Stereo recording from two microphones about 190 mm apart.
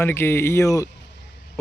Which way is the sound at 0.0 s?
10° left (ahead or behind).